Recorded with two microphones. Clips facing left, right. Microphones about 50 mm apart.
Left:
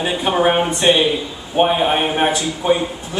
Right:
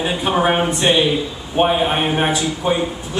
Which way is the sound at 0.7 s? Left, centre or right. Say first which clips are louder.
Left 1 dB; centre.